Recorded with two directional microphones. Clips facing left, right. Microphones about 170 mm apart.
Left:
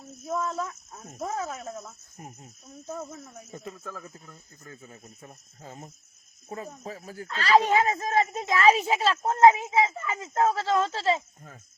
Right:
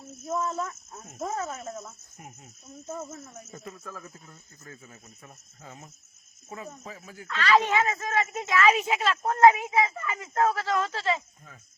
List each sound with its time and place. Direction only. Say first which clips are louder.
0.3 s speech: even; 5° right (ahead or behind)
2.9 s speech: even; 5° right (ahead or behind)
3.5 s speech: left 3 dB; 30° left (ahead or behind)